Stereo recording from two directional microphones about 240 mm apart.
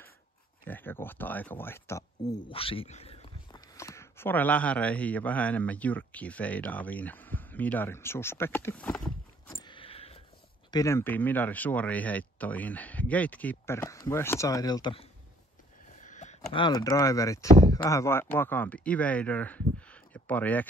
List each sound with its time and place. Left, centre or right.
0.7 s speech: centre
2.5 s a sound: left
3.7 s a man's voice: centre
9.7 s a sound: left
10.7 s speech: centre
15.9 s speech: left; by 20.6 s centre